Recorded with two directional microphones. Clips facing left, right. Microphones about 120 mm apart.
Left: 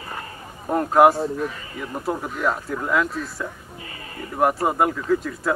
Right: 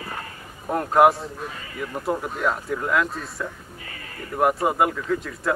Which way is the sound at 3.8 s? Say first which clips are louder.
Left 2 dB; 25° left (ahead or behind).